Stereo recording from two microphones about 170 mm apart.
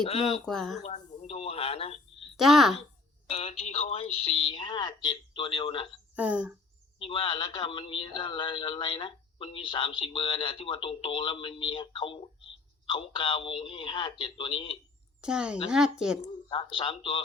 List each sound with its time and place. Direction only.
0.1 s a woman's voice: 35° left (ahead or behind)
0.4 s speech: centre (ahead or behind)
0.9 s a sound: 40° left (ahead or behind)
2.3 s a woman's voice: centre (ahead or behind)
3.2 s a woman's voice: 35° left (ahead or behind)
6.1 s speech: 10° right (ahead or behind)
7.0 s speech: 30° left (ahead or behind)
15.2 s speech: 5° right (ahead or behind)
16.5 s speech: 30° left (ahead or behind)